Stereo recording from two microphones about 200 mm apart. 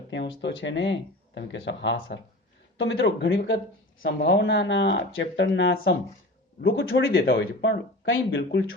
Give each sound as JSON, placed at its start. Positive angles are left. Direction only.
{"t": 0.4, "sound": "speech", "side_deg": 65}
{"t": 4.0, "sound": "speech", "side_deg": 60}